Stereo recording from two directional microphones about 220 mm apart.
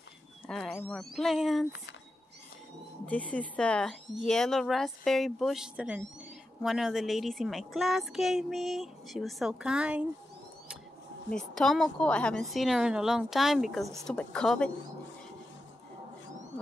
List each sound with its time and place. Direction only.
0.5 s a child's voice: centre (ahead or behind)
3.1 s a child's voice: 5° left (ahead or behind)
11.2 s a child's voice: centre (ahead or behind)